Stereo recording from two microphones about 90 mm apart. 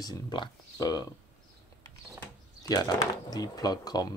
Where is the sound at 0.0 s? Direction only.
50° left (ahead or behind).